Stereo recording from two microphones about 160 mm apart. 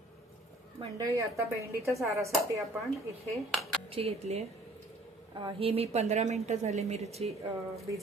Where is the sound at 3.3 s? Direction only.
Centre (ahead or behind).